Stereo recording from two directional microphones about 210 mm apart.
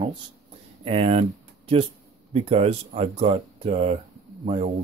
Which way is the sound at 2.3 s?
30° right (ahead or behind).